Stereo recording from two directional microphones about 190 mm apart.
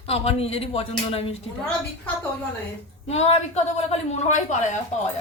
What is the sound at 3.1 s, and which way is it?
A man's voice, 35° left (ahead or behind).